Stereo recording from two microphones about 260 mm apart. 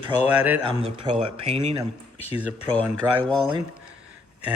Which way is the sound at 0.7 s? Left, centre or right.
Right.